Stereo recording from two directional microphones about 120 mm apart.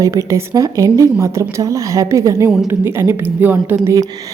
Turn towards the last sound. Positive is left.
turn(degrees=-25)  # may be behind; listen again after turning